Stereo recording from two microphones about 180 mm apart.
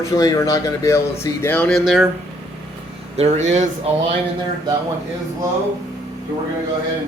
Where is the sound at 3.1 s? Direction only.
40° right (ahead or behind).